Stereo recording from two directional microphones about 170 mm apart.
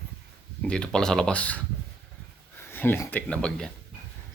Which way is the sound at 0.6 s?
5° left (ahead or behind).